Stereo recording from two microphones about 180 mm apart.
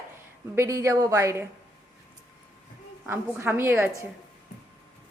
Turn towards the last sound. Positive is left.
turn(degrees=-15)  # may be behind; listen again after turning